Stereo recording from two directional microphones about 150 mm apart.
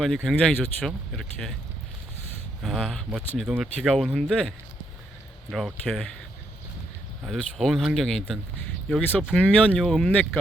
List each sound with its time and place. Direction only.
0.0 s speech: centre (ahead or behind)
2.6 s speech: centre (ahead or behind)
7.3 s speech: centre (ahead or behind)